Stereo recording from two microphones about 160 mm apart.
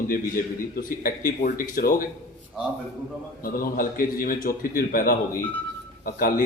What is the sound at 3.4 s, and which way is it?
A man's voice, 65° left (ahead or behind).